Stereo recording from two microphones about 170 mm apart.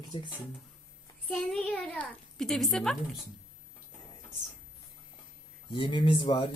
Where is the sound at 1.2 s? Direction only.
5° left (ahead or behind).